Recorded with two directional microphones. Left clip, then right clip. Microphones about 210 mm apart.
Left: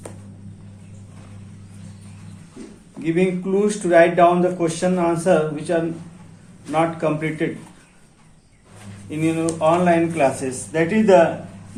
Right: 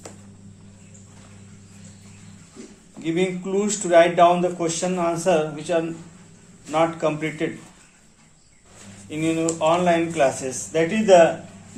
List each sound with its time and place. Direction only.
3.0 s speech: 15° right (ahead or behind)
9.0 s speech: 15° right (ahead or behind)